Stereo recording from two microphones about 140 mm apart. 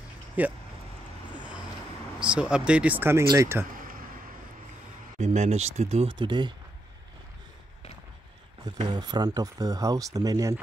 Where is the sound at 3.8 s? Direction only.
85° right.